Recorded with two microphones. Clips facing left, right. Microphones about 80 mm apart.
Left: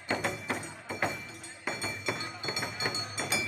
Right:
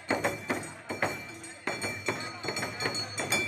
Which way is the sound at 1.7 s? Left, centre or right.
Centre.